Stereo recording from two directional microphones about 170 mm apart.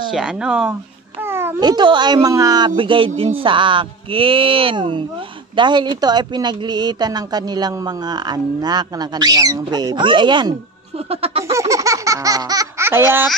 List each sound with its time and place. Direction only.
0.1 s speech: 5° right (ahead or behind)
1.2 s babbling: 15° right (ahead or behind)
1.6 s speech: 25° right (ahead or behind)
11.5 s speech: 20° right (ahead or behind)